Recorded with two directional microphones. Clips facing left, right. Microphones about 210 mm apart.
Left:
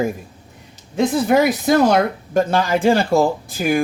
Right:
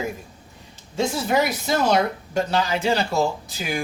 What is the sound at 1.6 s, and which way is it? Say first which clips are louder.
Speech: left 6 dB; 50° left (ahead or behind).